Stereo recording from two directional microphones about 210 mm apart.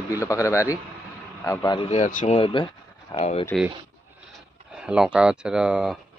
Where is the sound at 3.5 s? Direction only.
5° left (ahead or behind).